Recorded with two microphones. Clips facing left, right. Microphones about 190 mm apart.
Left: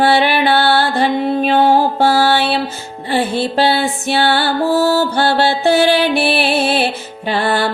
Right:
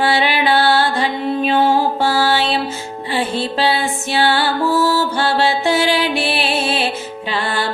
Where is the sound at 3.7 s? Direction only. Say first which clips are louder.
Left 3 dB; 60° left (ahead or behind).